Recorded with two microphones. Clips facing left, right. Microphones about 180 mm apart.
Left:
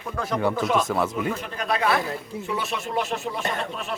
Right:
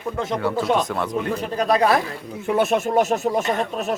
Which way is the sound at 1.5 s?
40° right (ahead or behind).